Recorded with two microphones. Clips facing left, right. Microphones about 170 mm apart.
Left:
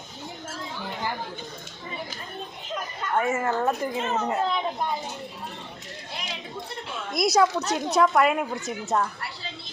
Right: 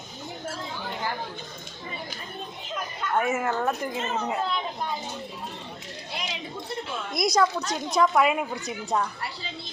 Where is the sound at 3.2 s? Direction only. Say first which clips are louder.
Left 1 dB; 15° right (ahead or behind).